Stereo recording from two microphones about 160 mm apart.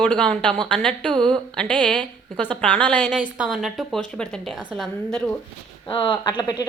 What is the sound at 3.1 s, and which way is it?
Speech, 5° right (ahead or behind).